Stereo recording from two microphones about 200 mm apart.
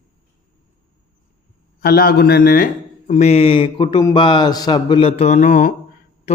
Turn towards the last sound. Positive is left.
turn(degrees=40)  # may be behind; listen again after turning